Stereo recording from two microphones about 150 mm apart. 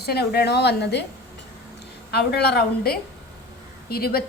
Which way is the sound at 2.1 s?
90° left.